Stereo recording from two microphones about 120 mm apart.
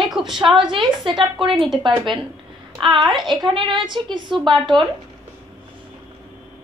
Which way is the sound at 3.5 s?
40° right (ahead or behind).